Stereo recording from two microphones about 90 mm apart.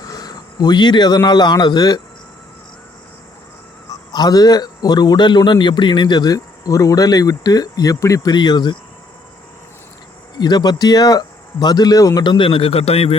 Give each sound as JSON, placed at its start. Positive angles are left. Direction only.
{"t": 0.0, "sound": "speech", "side_deg": 45}
{"t": 3.8, "sound": "a man's voice", "side_deg": 50}
{"t": 10.3, "sound": "a man's voice", "side_deg": 50}
{"t": 12.2, "sound": "a man's voice", "side_deg": 65}